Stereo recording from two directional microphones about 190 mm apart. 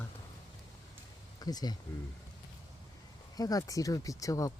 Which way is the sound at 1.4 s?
20° left (ahead or behind).